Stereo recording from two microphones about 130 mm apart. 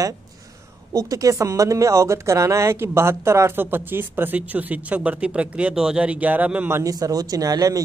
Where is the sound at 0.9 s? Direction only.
25° right (ahead or behind).